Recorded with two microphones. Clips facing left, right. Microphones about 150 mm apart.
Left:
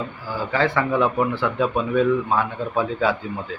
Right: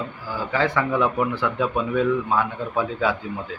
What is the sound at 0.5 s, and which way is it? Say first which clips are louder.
Speech: left 1 dB; 15° right (ahead or behind).